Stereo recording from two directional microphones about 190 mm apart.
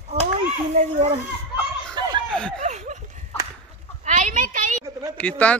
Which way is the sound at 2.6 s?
40° right (ahead or behind).